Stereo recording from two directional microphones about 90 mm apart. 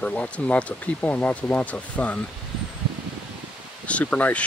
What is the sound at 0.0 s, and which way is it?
Speech, 15° left (ahead or behind).